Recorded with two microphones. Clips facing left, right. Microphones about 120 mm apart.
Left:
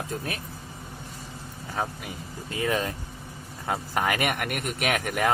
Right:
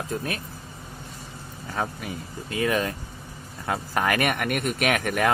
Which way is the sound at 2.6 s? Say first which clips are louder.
Right 2 dB; 20° left (ahead or behind).